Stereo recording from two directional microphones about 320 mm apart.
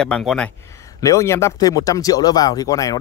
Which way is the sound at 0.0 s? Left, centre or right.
Centre.